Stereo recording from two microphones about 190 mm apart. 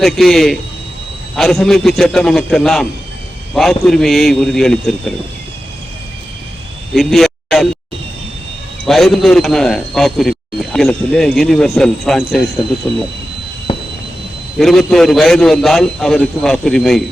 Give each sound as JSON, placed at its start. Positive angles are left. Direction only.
{"t": 0.0, "sound": "a man's voice", "side_deg": 0}
{"t": 6.9, "sound": "a sound", "side_deg": 0}
{"t": 8.9, "sound": "a man's voice", "side_deg": 0}
{"t": 14.6, "sound": "a man's voice", "side_deg": 0}